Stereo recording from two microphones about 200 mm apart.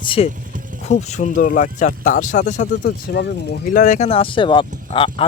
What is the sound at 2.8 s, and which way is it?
Speech, 55° left (ahead or behind).